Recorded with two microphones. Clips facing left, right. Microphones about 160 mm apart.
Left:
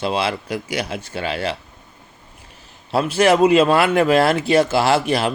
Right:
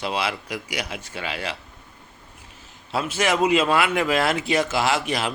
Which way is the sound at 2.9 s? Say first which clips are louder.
Left 7 dB; 35° left (ahead or behind).